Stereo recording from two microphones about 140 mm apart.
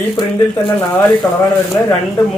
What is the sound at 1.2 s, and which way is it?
Speech, 15° left (ahead or behind).